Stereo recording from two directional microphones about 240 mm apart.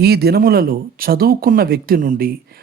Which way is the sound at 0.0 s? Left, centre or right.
Right.